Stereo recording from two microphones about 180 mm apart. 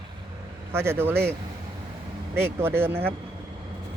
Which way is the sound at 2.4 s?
15° right (ahead or behind).